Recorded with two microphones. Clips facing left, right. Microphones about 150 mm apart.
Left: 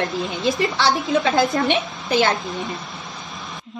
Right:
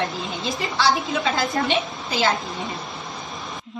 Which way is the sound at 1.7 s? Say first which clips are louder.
Left 3 dB; 45° left (ahead or behind).